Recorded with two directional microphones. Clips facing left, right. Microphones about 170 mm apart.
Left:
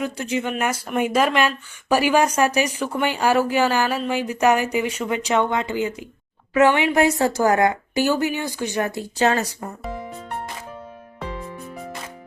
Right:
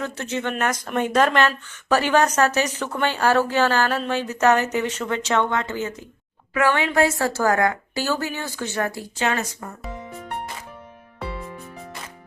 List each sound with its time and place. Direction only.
0.0 s speech: 10° left (ahead or behind)
9.1 s speech: 35° left (ahead or behind)